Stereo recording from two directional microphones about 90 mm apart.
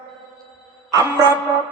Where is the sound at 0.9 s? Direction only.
35° right (ahead or behind).